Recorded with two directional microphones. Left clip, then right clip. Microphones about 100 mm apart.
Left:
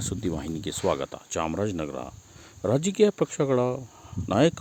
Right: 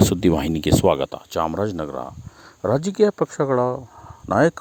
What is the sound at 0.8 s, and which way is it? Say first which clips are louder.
Speech: right 7 dB; 90° right.